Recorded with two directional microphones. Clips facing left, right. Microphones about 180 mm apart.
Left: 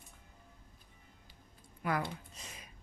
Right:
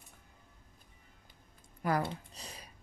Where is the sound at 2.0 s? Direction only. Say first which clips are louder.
Right 3 dB; 35° right (ahead or behind).